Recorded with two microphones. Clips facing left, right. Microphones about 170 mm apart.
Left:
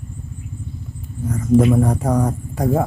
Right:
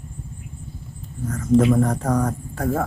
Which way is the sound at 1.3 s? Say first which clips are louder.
Left 2 dB; 10° left (ahead or behind).